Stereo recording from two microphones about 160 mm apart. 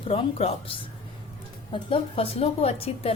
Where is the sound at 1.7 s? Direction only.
35° left (ahead or behind).